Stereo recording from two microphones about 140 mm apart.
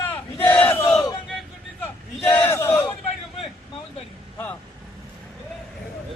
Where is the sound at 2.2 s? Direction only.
15° left (ahead or behind).